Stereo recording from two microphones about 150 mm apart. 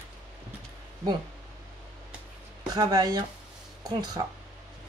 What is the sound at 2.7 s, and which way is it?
A woman's voice, 25° right (ahead or behind).